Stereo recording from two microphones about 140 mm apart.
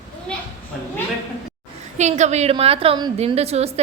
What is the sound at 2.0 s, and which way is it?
A woman's voice, 55° right (ahead or behind).